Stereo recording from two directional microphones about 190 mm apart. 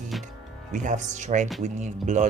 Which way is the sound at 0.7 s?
40° right (ahead or behind).